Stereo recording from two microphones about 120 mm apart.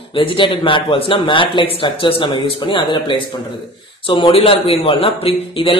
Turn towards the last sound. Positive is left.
turn(degrees=50)  # may be behind; listen again after turning